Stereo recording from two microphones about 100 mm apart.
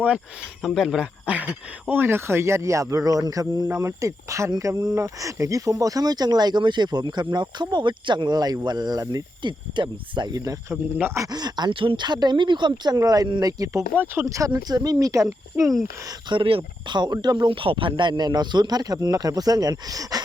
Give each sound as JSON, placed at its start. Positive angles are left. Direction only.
{"t": 0.6, "sound": "speech", "side_deg": 0}
{"t": 11.3, "sound": "speech", "side_deg": -45}
{"t": 13.0, "sound": "speech", "side_deg": -35}
{"t": 13.2, "sound": "speech", "side_deg": -50}
{"t": 13.9, "sound": "speech", "side_deg": -20}
{"t": 14.3, "sound": "speech", "side_deg": -35}
{"t": 16.3, "sound": "speech", "side_deg": -65}